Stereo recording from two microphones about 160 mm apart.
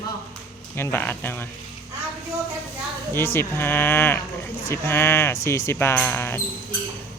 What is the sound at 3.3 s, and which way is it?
A man's voice, 15° left (ahead or behind).